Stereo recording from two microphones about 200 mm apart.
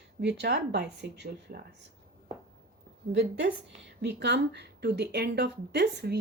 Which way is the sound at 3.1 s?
60° right (ahead or behind).